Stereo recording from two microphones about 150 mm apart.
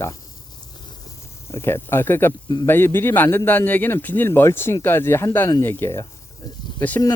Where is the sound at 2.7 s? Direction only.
15° left (ahead or behind).